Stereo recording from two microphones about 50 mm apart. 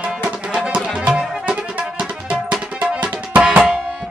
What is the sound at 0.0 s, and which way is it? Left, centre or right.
Music, right.